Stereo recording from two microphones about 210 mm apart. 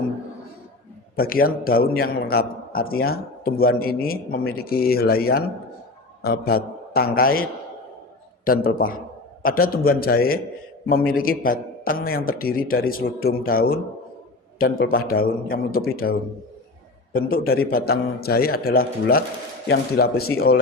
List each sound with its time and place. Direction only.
1.1 s a man's voice: 45° left (ahead or behind)
8.4 s a man's voice: 45° left (ahead or behind)
17.1 s a man's voice: 45° left (ahead or behind)